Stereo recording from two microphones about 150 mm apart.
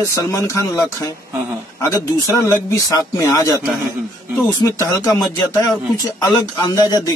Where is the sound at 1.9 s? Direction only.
20° left (ahead or behind).